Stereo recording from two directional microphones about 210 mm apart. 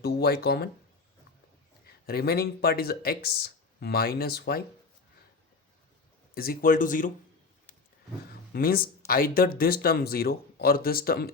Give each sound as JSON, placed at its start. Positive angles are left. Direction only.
{"t": 0.0, "sound": "speech", "side_deg": 50}
{"t": 2.0, "sound": "speech", "side_deg": 45}
{"t": 6.3, "sound": "speech", "side_deg": 45}
{"t": 8.3, "sound": "speech", "side_deg": 45}